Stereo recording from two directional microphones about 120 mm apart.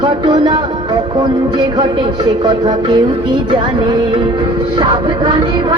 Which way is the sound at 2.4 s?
40° right (ahead or behind).